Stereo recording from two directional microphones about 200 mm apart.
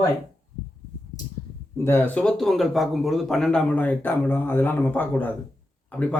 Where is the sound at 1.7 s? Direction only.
10° left (ahead or behind).